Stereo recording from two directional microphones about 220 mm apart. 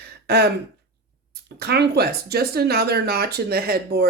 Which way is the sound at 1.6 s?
45° right (ahead or behind).